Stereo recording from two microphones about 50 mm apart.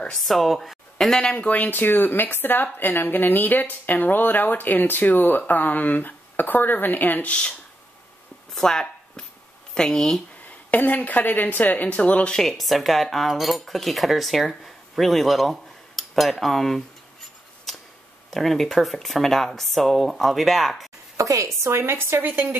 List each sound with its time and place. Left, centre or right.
0.1 s speech: centre
1.4 s a woman's voice: left
8.5 s a sound: centre
9.8 s speech: centre
10.7 s a woman's voice: left
12.4 s speech: centre
16.0 s cutlery: centre
17.7 s a sound: centre
18.3 s speech: centre
21.2 s speech: right
21.6 s a woman's voice: right